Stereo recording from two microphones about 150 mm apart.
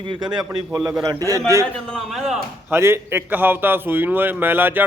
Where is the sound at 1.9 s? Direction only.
Centre (ahead or behind).